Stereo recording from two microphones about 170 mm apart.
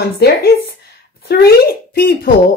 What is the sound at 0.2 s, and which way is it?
A woman's voice, 80° left.